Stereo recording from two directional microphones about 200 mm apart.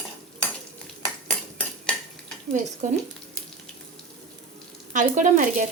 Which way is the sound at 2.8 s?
40° right (ahead or behind).